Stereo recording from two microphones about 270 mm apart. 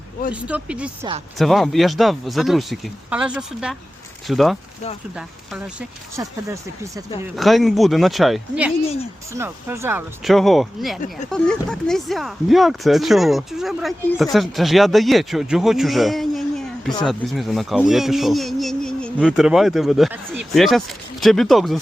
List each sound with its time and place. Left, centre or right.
0.3 s a man's voice: centre
7.2 s a man's voice: centre
8.8 s speech: left
9.3 s a man's voice: centre